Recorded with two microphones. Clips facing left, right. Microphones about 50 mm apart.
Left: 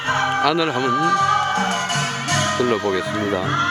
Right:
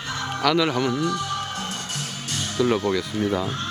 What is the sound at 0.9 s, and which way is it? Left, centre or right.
Music, left.